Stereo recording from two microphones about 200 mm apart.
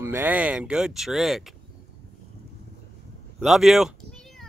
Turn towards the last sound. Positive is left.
turn(degrees=0)  # may be behind; listen again after turning